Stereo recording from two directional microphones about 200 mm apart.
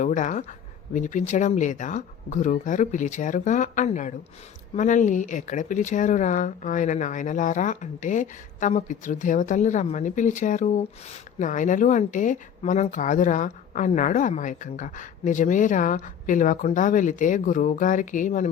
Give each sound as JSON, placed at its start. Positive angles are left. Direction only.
{"t": 0.0, "sound": "speech", "side_deg": 40}